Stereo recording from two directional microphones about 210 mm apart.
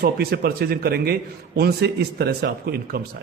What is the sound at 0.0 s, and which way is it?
A man's voice, 45° right (ahead or behind).